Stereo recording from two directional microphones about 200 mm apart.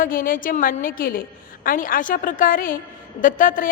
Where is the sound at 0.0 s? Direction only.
45° left (ahead or behind).